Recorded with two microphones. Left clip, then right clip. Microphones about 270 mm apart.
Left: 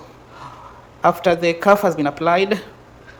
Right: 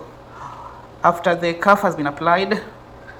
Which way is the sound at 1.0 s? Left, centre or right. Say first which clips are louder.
Left 1 dB; left.